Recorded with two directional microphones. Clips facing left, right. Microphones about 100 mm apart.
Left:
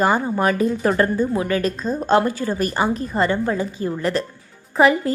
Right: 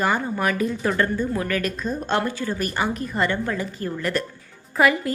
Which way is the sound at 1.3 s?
20° left (ahead or behind).